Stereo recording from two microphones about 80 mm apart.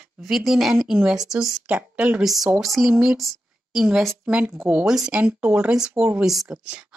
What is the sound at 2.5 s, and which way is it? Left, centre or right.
Speech, centre.